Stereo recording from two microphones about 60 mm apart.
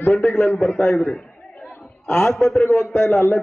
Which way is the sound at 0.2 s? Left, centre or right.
Centre.